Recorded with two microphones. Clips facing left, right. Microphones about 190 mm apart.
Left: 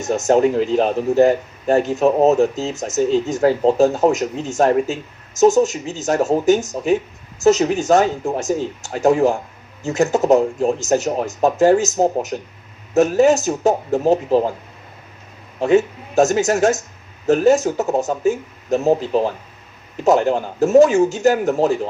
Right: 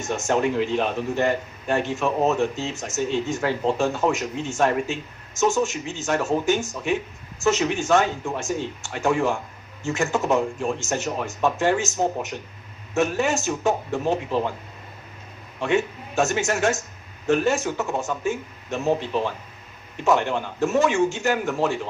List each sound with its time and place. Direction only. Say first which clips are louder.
0.0 s a man's voice: left 7 dB; 40° left (ahead or behind)
15.6 s a man's voice: left 8 dB; 40° left (ahead or behind)